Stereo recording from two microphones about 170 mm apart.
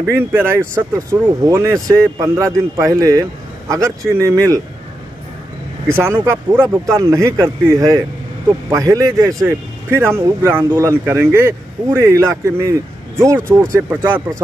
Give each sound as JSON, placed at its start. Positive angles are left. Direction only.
{"t": 0.0, "sound": "speech", "side_deg": -15}
{"t": 5.9, "sound": "speech", "side_deg": -15}